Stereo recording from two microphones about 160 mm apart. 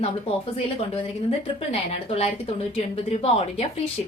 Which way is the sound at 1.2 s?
40° left (ahead or behind).